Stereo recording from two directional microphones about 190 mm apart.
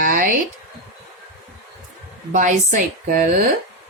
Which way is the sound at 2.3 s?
40° right (ahead or behind).